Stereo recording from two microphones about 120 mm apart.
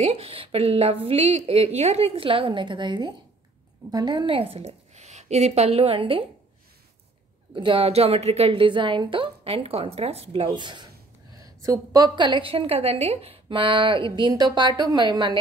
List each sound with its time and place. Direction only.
0.0 s a woman's voice: 55° right (ahead or behind)
1.4 s a woman's voice: 55° right (ahead or behind)
7.5 s a woman's voice: 45° right (ahead or behind)